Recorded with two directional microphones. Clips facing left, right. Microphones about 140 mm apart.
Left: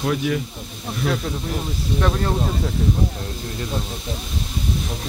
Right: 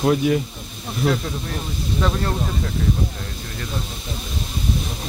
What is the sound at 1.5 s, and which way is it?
Speech, 5° left (ahead or behind).